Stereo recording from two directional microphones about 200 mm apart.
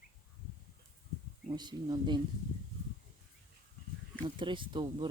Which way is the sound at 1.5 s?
20° right (ahead or behind).